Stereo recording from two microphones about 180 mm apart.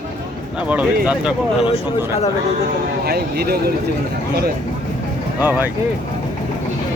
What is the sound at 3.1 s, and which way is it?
Speech, 60° right (ahead or behind).